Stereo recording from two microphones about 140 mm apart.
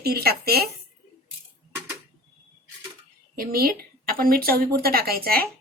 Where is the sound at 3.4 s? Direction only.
90° right.